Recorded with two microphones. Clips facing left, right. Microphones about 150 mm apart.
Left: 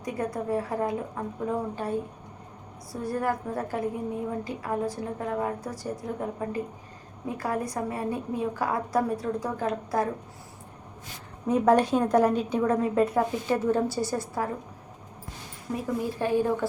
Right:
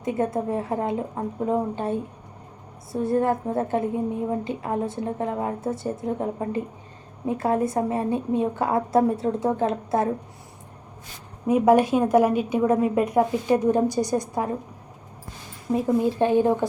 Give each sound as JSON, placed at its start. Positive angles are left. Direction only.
{"t": 0.0, "sound": "a woman's voice", "side_deg": -25}
{"t": 11.4, "sound": "a woman's voice", "side_deg": -10}
{"t": 15.7, "sound": "a woman's voice", "side_deg": -25}